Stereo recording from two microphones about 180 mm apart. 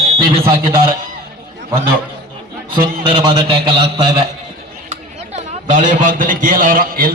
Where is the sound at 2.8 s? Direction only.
30° right (ahead or behind).